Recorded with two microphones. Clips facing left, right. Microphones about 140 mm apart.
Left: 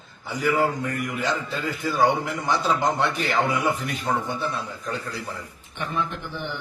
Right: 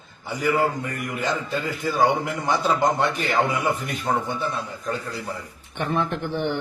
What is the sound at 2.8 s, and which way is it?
Speech, 50° right (ahead or behind).